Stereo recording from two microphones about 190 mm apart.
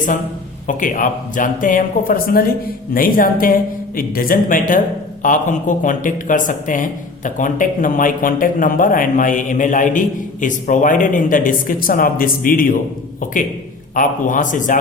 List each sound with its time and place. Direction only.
0.7 s a man's voice: 45° left (ahead or behind)
13.9 s a man's voice: 45° left (ahead or behind)